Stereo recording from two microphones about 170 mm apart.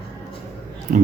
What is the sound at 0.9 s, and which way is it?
Speech, 50° right (ahead or behind).